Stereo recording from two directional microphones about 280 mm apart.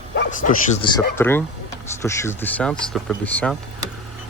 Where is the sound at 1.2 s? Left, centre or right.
Centre.